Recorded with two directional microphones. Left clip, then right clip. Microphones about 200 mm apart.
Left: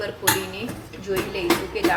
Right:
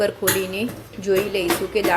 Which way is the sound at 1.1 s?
40° right (ahead or behind).